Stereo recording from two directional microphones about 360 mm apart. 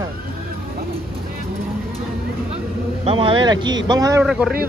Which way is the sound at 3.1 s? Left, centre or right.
Centre.